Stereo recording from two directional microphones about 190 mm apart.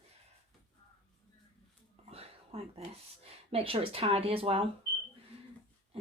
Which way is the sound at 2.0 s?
30° right (ahead or behind).